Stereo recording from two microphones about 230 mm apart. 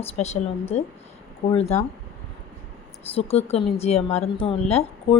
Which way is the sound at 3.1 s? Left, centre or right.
Left.